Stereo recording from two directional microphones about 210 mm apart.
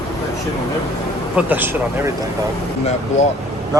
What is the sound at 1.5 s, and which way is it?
Speech, 10° right (ahead or behind).